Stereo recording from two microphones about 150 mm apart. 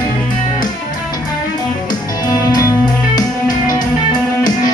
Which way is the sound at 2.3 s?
25° left (ahead or behind).